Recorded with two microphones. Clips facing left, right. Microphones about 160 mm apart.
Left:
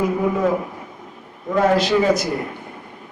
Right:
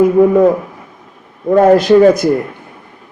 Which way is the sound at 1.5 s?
50° right (ahead or behind).